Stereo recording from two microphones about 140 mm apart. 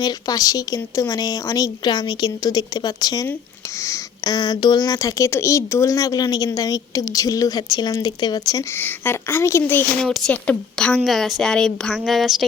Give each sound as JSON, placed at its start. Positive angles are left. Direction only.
{"t": 0.0, "sound": "speech", "side_deg": 25}
{"t": 8.8, "sound": "a woman's voice", "side_deg": 15}
{"t": 10.0, "sound": "a woman's voice", "side_deg": 5}